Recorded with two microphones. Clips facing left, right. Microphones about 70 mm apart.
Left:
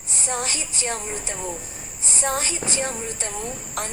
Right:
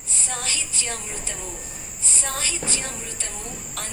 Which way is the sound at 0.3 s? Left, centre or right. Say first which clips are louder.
Left 4 dB; left.